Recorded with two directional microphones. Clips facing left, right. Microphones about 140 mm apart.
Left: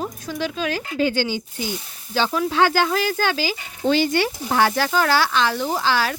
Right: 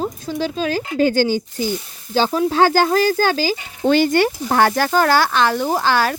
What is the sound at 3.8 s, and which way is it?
Speech, 55° right (ahead or behind).